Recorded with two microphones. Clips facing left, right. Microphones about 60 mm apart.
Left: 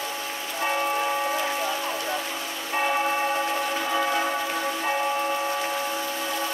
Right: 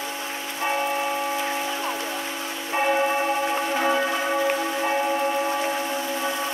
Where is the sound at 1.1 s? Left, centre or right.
Centre.